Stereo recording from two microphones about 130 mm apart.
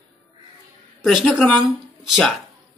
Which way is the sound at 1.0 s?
Centre (ahead or behind).